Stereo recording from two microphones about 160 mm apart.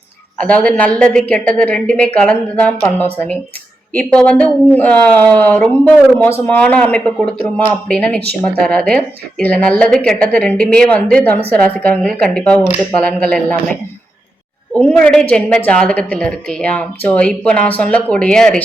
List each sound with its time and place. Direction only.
0.3 s a woman's voice: 10° left (ahead or behind)
14.8 s a woman's voice: 10° left (ahead or behind)